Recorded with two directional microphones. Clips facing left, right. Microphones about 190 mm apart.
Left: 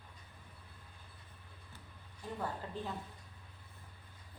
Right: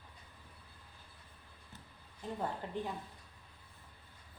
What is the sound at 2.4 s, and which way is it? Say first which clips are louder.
Speech: right 2 dB; 15° right (ahead or behind).